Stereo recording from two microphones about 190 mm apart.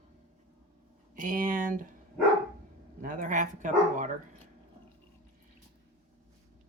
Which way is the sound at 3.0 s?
45° right (ahead or behind).